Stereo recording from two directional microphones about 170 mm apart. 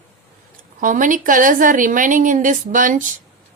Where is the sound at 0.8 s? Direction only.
50° right (ahead or behind).